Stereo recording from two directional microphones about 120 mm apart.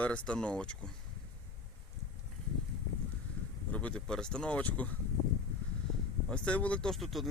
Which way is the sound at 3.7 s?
10° left (ahead or behind).